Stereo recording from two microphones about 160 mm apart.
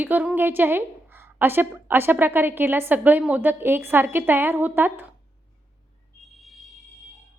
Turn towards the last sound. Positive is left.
turn(degrees=0)  # may be behind; listen again after turning